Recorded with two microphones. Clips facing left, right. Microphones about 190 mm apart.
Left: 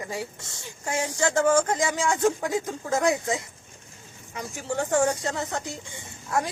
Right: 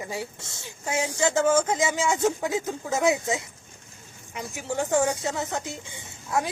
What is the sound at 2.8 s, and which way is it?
Speech, 10° right (ahead or behind).